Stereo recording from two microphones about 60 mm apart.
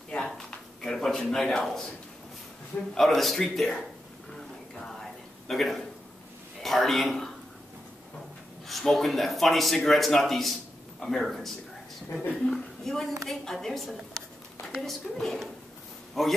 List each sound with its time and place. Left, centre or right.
0.1 s a sound: centre
2.9 s speech: centre
4.3 s a sound: centre
6.6 s speech: centre
8.6 s speech: centre
12.1 s a woman's voice: left
12.4 s a woman's voice: centre